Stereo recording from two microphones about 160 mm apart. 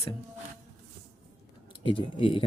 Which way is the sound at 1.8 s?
30° left (ahead or behind).